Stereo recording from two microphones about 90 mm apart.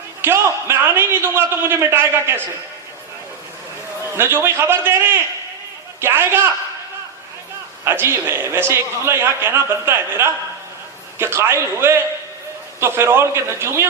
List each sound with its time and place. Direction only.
0.2 s a man's voice: 25° right (ahead or behind)
4.2 s a man's voice: 25° right (ahead or behind)
7.9 s a man's voice: 30° right (ahead or behind)